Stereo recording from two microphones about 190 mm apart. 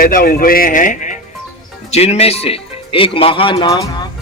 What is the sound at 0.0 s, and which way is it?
Speech, 50° left (ahead or behind).